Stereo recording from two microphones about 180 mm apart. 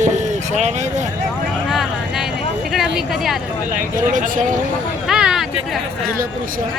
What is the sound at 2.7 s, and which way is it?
Speech, centre (ahead or behind).